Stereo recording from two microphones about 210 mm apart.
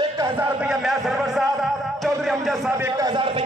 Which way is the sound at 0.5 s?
5° right (ahead or behind).